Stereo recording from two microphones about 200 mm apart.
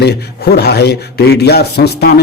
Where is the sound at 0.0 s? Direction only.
55° left (ahead or behind).